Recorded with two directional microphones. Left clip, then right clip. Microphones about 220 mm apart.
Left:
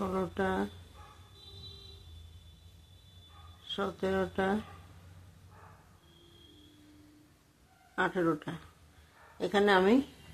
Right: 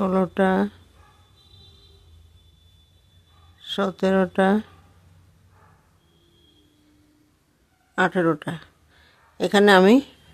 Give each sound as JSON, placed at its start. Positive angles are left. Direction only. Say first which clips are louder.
{"t": 0.0, "sound": "speech", "louder": "right 12 dB", "side_deg": -50}
{"t": 3.6, "sound": "speech", "louder": "right 11 dB", "side_deg": -55}
{"t": 7.9, "sound": "speech", "louder": "right 10 dB", "side_deg": -50}